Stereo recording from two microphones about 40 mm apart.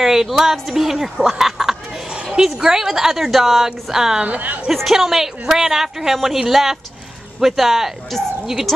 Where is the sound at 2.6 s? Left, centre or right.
Centre.